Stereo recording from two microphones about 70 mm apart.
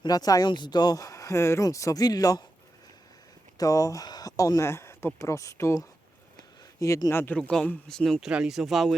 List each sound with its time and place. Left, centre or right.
0.0 s speech: left
3.6 s speech: left
4.6 s speech: left
5.2 s speech: left
6.7 s speech: left
7.3 s speech: centre
8.2 s speech: centre